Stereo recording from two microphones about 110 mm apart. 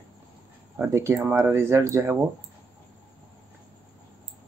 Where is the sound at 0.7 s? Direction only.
25° right (ahead or behind).